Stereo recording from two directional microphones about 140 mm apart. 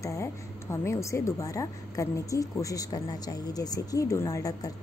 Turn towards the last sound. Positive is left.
turn(degrees=25)  # may be behind; listen again after turning